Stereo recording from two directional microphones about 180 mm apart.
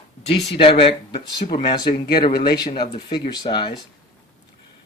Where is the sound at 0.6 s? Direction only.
30° left (ahead or behind).